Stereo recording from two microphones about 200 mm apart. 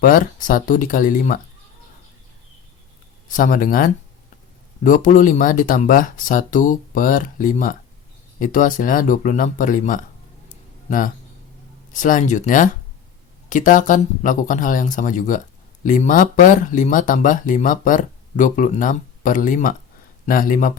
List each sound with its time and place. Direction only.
0.0 s speech: 45° left (ahead or behind)
3.2 s speech: 40° left (ahead or behind)
10.5 s a sound: 40° left (ahead or behind)
11.9 s speech: 40° left (ahead or behind)